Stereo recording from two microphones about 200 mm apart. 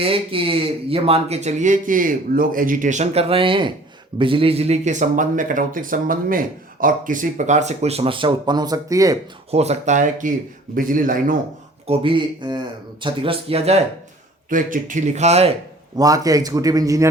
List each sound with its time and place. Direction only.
0.0 s speech: 25° right (ahead or behind)
9.5 s speech: 30° right (ahead or behind)
11.9 s speech: 25° right (ahead or behind)
16.0 s a man's voice: 20° right (ahead or behind)